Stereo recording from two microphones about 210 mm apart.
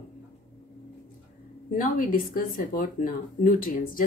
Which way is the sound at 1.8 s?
40° left (ahead or behind).